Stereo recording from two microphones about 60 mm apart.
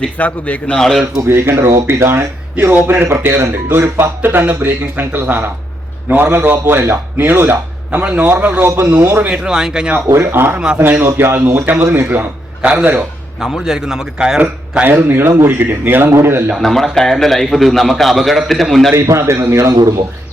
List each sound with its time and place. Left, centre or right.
0.2 s a man's voice: left
1.3 s speech: right
3.1 s speech: right
7.9 s a man's voice: right
8.6 s speech: right
9.3 s a man's voice: centre
10.1 s speech: right
12.6 s a man's voice: right
13.4 s a man's voice: centre
14.8 s speech: right
16.6 s a man's voice: centre
18.9 s speech: right